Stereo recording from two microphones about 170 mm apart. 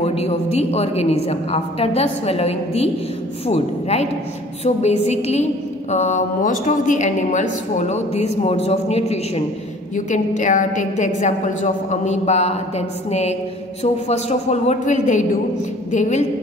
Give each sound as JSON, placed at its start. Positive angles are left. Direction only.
{"t": 0.0, "sound": "a woman's voice", "side_deg": 35}